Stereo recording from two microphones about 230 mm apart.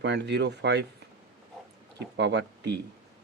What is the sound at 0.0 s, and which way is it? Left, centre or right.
Speech, right.